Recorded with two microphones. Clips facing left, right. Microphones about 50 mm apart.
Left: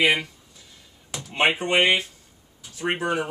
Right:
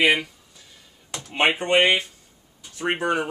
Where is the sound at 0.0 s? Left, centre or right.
Centre.